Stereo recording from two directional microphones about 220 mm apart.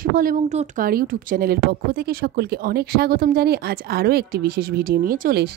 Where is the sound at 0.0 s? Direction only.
40° right (ahead or behind).